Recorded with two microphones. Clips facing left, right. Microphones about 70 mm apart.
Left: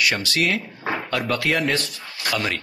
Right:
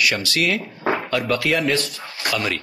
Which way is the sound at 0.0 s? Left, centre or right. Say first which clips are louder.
Right 1 dB; left.